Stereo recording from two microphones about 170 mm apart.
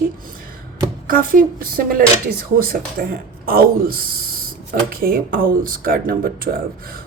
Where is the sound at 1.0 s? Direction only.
55° right (ahead or behind).